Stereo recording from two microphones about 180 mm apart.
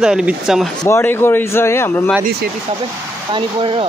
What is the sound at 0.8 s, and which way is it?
A man's voice, 10° left (ahead or behind).